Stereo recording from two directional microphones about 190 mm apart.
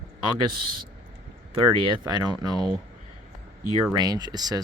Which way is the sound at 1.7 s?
25° right (ahead or behind).